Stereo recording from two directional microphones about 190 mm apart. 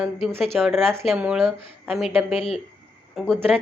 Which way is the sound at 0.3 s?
Centre (ahead or behind).